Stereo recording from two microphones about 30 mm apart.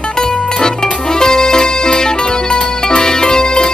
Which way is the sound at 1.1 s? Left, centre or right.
Left.